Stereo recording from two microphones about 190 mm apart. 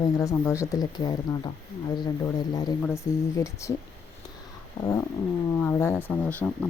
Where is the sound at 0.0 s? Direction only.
15° left (ahead or behind).